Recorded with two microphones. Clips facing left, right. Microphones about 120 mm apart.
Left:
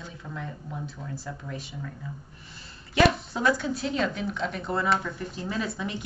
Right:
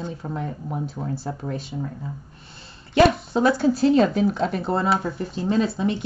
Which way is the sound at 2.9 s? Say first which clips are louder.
Right 6 dB; 30° right (ahead or behind).